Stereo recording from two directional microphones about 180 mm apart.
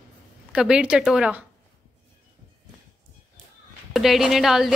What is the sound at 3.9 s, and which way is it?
Speech, centre (ahead or behind).